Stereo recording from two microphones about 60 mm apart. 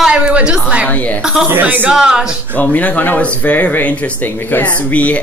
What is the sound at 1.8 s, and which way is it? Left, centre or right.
Speech, centre.